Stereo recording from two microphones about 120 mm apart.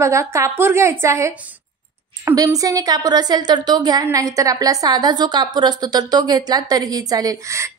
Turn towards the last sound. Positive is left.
turn(degrees=-30)  # may be behind; listen again after turning